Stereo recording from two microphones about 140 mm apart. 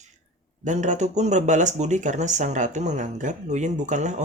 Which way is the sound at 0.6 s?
60° right (ahead or behind).